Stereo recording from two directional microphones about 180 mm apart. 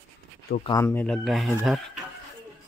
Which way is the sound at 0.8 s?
10° left (ahead or behind).